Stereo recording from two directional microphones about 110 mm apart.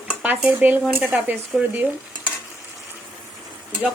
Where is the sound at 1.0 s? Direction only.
10° right (ahead or behind).